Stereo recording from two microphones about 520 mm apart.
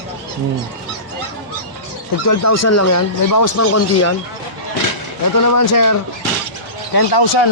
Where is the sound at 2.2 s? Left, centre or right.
Left.